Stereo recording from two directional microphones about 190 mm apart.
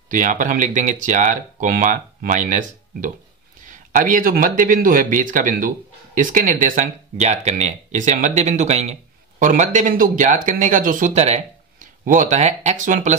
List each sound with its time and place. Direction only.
0.1 s speech: 40° right (ahead or behind)